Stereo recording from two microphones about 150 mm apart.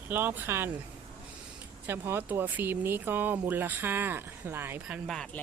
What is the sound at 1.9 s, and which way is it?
Speech, 15° right (ahead or behind).